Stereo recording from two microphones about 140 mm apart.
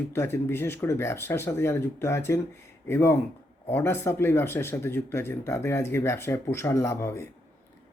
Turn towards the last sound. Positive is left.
turn(degrees=20)  # may be behind; listen again after turning